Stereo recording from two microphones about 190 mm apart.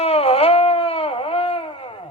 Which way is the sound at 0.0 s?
30° left (ahead or behind).